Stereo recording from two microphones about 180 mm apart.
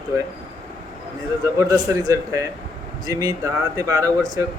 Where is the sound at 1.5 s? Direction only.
20° right (ahead or behind).